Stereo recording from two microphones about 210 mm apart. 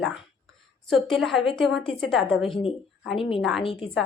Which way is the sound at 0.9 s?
Centre (ahead or behind).